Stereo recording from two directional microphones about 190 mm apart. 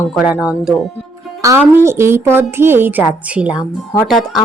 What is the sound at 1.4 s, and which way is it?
A woman's voice, 15° right (ahead or behind).